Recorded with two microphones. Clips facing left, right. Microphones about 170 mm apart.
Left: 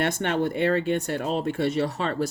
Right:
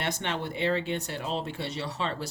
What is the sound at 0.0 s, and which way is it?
Speech, 50° left (ahead or behind).